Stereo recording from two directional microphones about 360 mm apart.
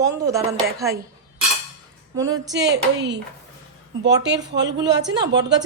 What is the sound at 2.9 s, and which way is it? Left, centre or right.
Speech, right.